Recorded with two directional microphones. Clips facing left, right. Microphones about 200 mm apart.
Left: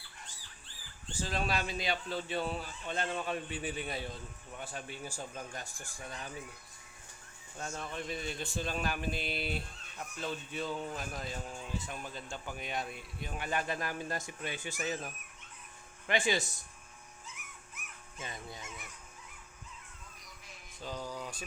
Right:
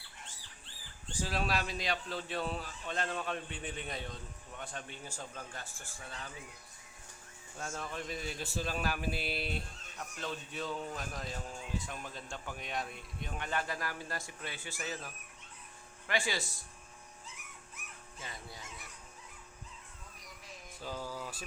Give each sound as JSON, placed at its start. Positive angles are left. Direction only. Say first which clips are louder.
{"t": 1.1, "sound": "a man's voice", "louder": "even", "side_deg": -5}
{"t": 7.7, "sound": "a man's voice", "louder": "left 1 dB", "side_deg": 0}
{"t": 17.2, "sound": "dog", "louder": "even", "side_deg": -35}
{"t": 18.2, "sound": "speech", "louder": "left 4 dB", "side_deg": 20}
{"t": 20.8, "sound": "a man's voice", "louder": "left 1 dB", "side_deg": -5}